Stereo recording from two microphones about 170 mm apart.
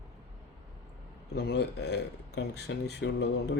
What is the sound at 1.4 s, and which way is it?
Speech, 75° left (ahead or behind).